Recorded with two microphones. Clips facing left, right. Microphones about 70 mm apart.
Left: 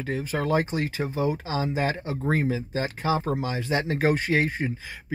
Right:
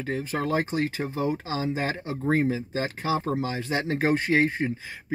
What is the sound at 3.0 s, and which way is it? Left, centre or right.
Speech, left.